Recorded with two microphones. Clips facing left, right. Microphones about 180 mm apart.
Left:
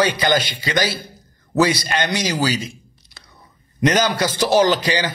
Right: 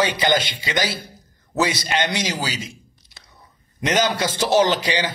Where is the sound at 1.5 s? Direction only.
25° right (ahead or behind).